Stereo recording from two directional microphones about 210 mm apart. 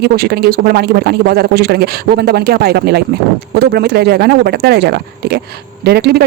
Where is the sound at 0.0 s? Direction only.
50° right (ahead or behind).